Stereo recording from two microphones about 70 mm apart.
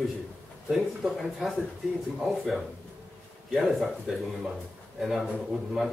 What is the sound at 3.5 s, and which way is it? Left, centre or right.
Speech, centre.